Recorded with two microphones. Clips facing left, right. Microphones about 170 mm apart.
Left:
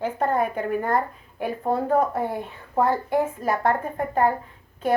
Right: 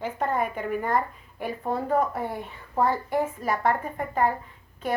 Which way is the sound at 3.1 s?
50° left (ahead or behind).